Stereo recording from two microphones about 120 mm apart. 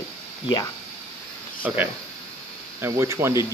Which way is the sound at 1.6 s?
15° right (ahead or behind).